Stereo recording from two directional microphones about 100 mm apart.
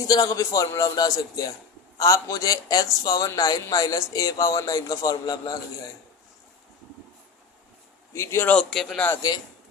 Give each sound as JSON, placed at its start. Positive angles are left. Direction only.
{"t": 0.1, "sound": "speech", "side_deg": 35}
{"t": 8.1, "sound": "speech", "side_deg": 30}
{"t": 8.5, "sound": "a man's voice", "side_deg": 0}